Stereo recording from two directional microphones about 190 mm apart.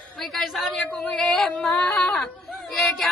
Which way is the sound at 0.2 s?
Centre (ahead or behind).